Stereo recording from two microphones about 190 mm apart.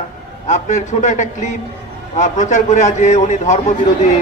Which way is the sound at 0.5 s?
40° left (ahead or behind).